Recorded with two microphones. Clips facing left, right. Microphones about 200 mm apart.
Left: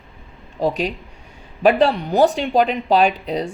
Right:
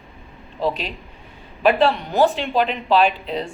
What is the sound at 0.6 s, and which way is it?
Speech, 45° left (ahead or behind).